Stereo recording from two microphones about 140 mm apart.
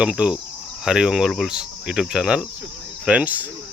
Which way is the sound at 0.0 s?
5° right (ahead or behind).